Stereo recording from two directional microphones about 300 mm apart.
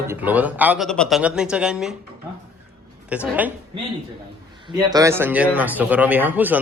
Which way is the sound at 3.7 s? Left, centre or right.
Centre.